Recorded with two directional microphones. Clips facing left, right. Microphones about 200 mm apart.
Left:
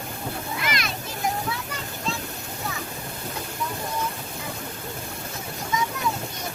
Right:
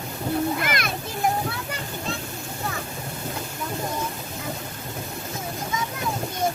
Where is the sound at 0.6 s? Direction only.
55° right (ahead or behind).